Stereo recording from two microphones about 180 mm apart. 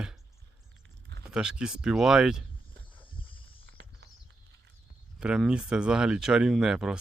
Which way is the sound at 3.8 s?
75° right (ahead or behind).